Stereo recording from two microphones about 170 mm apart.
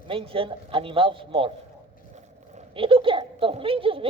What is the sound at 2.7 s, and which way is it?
Speech, 30° right (ahead or behind).